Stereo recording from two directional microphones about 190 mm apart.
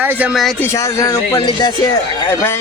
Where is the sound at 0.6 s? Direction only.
15° left (ahead or behind).